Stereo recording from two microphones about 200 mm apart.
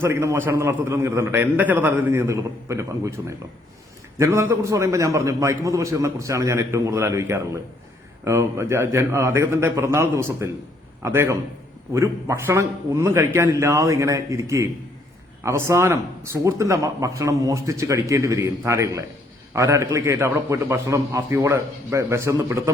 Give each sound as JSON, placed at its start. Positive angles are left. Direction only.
{"t": 0.0, "sound": "speech", "side_deg": -15}